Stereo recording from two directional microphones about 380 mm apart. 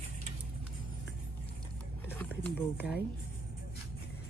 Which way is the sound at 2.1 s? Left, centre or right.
Centre.